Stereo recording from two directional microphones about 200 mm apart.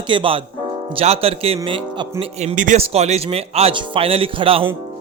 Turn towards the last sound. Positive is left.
turn(degrees=-25)  # may be behind; listen again after turning